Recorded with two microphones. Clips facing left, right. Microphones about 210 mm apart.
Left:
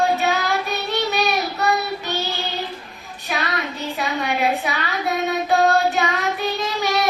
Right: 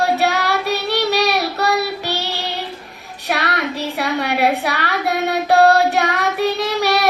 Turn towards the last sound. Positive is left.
turn(degrees=-70)  # may be behind; listen again after turning